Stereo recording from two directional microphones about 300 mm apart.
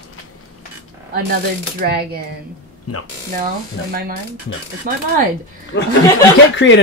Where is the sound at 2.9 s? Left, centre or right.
Left.